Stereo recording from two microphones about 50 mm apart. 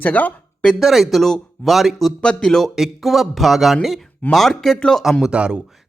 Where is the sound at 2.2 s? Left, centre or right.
Centre.